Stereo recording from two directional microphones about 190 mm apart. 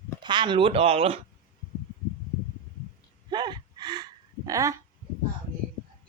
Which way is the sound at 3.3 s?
20° right (ahead or behind).